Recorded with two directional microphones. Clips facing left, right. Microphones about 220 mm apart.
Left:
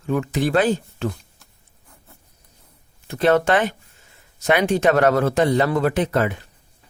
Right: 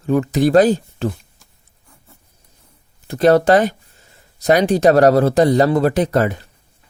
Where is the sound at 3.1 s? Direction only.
35° right (ahead or behind).